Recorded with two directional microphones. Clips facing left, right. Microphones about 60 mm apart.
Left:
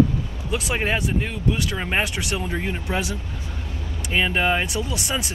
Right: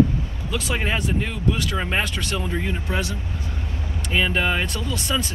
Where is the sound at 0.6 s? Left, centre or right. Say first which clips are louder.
Left 1 dB; centre.